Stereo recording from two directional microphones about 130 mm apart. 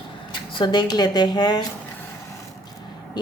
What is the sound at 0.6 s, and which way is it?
A woman's voice, 35° left (ahead or behind).